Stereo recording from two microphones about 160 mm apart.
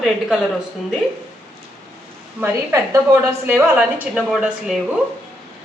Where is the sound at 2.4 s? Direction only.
20° right (ahead or behind).